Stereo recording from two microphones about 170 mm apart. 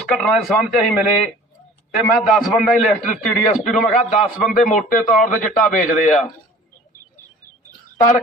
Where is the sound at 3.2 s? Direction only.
50° left (ahead or behind).